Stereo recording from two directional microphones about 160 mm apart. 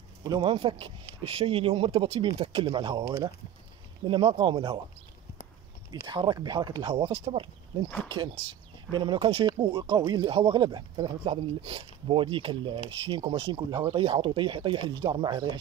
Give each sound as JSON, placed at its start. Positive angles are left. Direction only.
{"t": 0.4, "sound": "speech", "side_deg": -35}
{"t": 4.1, "sound": "speech", "side_deg": -30}
{"t": 5.9, "sound": "speech", "side_deg": -30}